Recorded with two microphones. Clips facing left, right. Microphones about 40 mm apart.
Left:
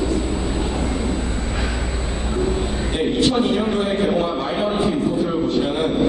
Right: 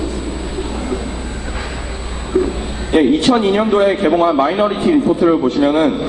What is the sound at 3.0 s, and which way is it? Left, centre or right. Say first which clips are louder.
A man's voice: right 7 dB; right.